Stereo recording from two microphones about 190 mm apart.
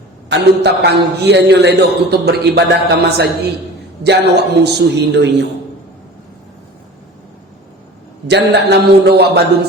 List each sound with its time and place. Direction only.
0.3 s a man's voice: 60° right (ahead or behind)
8.3 s a man's voice: 60° right (ahead or behind)